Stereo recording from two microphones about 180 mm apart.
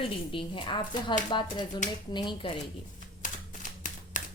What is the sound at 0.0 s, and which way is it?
Speech, 30° left (ahead or behind).